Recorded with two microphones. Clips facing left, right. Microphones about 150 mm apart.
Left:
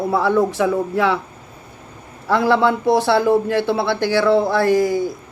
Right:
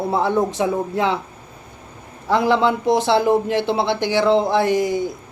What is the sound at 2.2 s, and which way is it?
A man's voice, 20° right (ahead or behind).